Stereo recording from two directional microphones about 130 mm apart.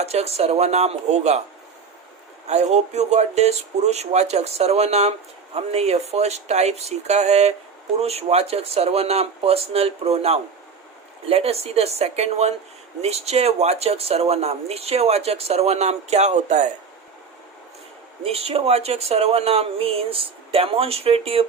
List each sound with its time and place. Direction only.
0.0 s speech: 55° right (ahead or behind)
2.5 s speech: 60° right (ahead or behind)
18.2 s speech: 50° right (ahead or behind)